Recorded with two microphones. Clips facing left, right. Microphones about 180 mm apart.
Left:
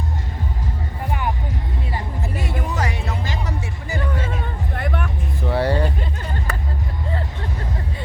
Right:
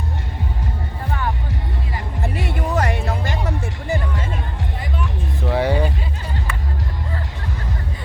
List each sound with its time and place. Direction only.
2.2 s music: 65° right (ahead or behind)
4.8 s music: 60° left (ahead or behind)
5.5 s a sound: 15° right (ahead or behind)
6.5 s music: 40° left (ahead or behind)